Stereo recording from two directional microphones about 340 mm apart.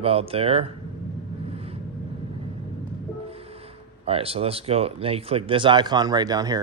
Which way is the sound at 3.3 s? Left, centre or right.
Centre.